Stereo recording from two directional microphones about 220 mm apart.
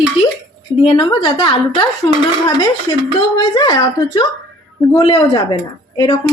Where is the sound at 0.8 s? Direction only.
20° left (ahead or behind).